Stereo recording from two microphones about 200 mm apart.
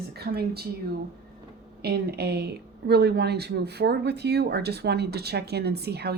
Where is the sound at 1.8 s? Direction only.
55° right (ahead or behind).